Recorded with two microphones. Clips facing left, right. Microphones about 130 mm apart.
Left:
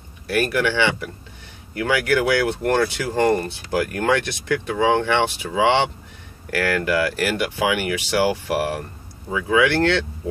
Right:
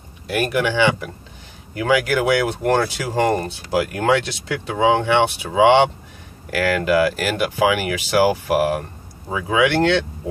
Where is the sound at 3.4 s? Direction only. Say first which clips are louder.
Right 2 dB; 20° right (ahead or behind).